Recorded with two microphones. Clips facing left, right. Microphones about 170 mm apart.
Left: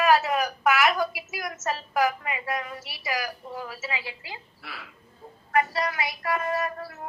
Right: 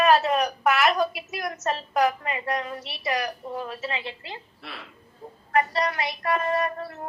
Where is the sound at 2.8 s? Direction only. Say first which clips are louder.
Right 3 dB; 5° left (ahead or behind).